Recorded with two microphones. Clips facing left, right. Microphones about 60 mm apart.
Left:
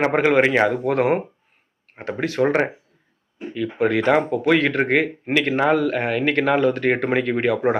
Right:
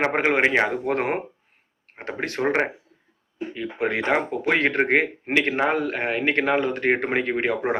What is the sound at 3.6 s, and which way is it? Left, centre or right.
Speech, right.